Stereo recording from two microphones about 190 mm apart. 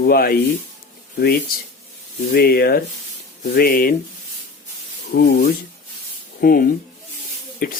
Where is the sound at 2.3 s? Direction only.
55° left (ahead or behind).